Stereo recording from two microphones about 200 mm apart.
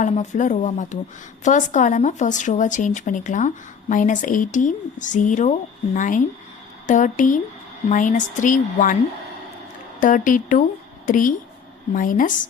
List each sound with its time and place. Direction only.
0.0 s speech: 40° left (ahead or behind)
10.0 s speech: 40° left (ahead or behind)